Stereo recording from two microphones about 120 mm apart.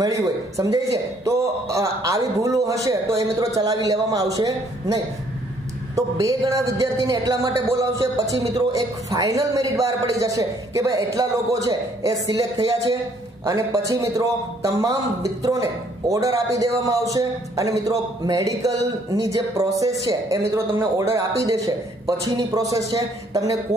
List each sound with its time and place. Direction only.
0.0 s a man's voice: 25° right (ahead or behind)